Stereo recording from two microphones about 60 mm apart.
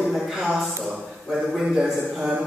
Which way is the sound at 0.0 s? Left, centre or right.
Centre.